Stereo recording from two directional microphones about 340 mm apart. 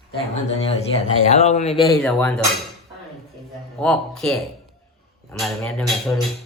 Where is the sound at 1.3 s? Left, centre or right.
Centre.